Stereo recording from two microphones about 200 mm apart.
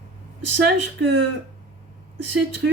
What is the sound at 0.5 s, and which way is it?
Speech, 65° right (ahead or behind).